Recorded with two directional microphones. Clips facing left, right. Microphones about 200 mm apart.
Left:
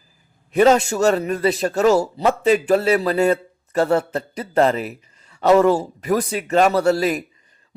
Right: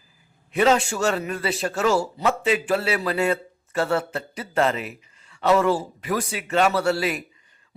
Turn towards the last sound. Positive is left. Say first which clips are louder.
# left 5 dB
turn(degrees=40)  # may be behind; listen again after turning